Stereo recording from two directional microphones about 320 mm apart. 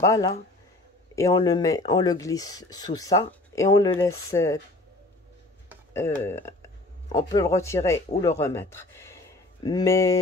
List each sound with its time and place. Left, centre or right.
0.0 s speech: centre
5.9 s speech: centre